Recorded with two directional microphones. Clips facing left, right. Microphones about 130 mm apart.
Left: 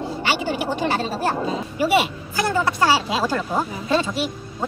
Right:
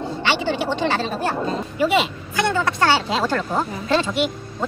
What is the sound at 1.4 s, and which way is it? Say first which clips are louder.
Speech: right 1 dB; 5° left (ahead or behind).